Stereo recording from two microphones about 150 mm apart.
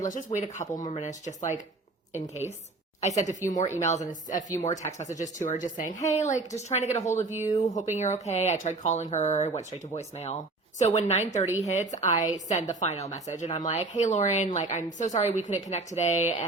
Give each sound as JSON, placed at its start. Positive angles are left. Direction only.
{"t": 0.0, "sound": "speech", "side_deg": 60}
{"t": 0.6, "sound": "speech", "side_deg": 25}
{"t": 0.9, "sound": "a woman's voice", "side_deg": 50}